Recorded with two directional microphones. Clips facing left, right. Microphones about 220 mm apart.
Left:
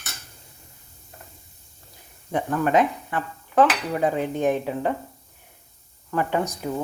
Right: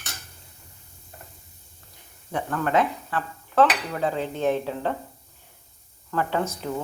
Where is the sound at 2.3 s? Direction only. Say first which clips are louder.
Left 3 dB; 15° left (ahead or behind).